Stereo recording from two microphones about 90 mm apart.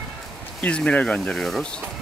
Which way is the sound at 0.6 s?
15° left (ahead or behind).